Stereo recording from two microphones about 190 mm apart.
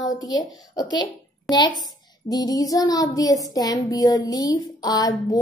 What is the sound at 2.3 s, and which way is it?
Child singing, 20° left (ahead or behind).